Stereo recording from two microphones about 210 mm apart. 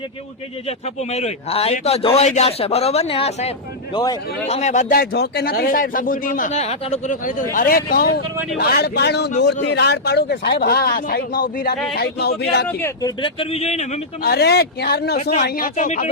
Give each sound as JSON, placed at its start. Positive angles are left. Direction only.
{"t": 1.1, "sound": "a man's voice", "side_deg": 30}
{"t": 4.4, "sound": "speech", "side_deg": 30}
{"t": 12.6, "sound": "a man's voice", "side_deg": 15}
{"t": 14.3, "sound": "speech", "side_deg": 50}
{"t": 15.2, "sound": "speech", "side_deg": 30}
{"t": 15.4, "sound": "speech", "side_deg": 45}